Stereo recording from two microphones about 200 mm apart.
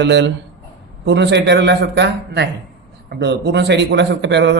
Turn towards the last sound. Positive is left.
turn(degrees=-60)  # may be behind; listen again after turning